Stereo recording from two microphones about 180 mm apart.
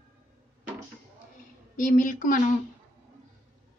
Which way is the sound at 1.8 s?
45° left (ahead or behind).